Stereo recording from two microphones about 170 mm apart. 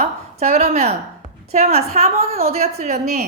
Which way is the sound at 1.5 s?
40° right (ahead or behind).